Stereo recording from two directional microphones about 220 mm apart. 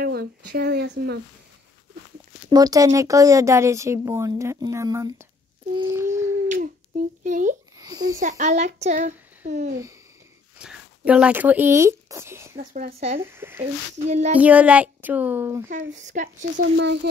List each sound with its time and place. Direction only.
0.0 s speech: 45° right (ahead or behind)
2.5 s speech: 15° right (ahead or behind)
5.7 s a sound: 15° right (ahead or behind)
6.5 s a sound: 35° right (ahead or behind)
7.8 s a sound: 15° right (ahead or behind)
8.2 s a child's voice: 35° right (ahead or behind)
10.6 s speech: 5° right (ahead or behind)
12.5 s speech: 30° right (ahead or behind)
13.2 s speech: 10° right (ahead or behind)
14.0 s a child's voice: 30° right (ahead or behind)
14.4 s speech: 5° right (ahead or behind)
16.1 s a child's voice: 35° right (ahead or behind)
16.5 s speech: 55° right (ahead or behind)